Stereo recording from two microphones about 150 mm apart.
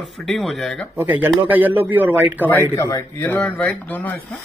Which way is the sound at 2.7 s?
25° left (ahead or behind).